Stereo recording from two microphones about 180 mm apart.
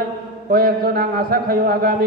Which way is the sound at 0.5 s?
60° right (ahead or behind).